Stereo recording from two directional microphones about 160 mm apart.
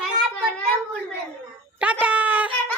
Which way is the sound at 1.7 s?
10° right (ahead or behind).